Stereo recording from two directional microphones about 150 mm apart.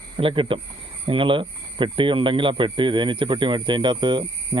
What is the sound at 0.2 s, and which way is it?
Speech, 35° right (ahead or behind).